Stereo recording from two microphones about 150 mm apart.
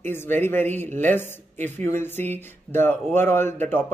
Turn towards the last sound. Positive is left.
turn(degrees=15)  # may be behind; listen again after turning